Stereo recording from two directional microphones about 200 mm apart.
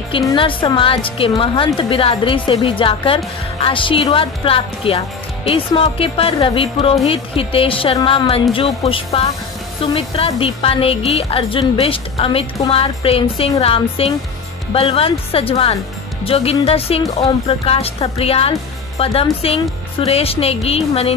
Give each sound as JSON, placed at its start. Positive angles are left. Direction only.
{"t": 0.1, "sound": "a woman's voice", "side_deg": 20}